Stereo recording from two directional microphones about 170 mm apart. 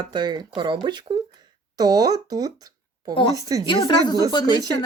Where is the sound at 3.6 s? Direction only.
25° left (ahead or behind).